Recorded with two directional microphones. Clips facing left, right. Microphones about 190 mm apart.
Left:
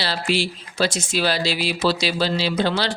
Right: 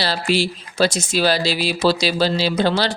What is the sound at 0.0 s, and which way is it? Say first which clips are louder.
Speech: right 3 dB; 40° right (ahead or behind).